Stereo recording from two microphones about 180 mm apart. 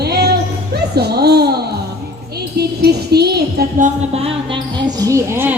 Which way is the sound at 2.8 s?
65° right (ahead or behind).